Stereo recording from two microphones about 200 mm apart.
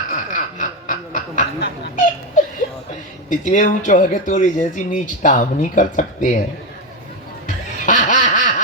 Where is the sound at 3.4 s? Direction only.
40° left (ahead or behind).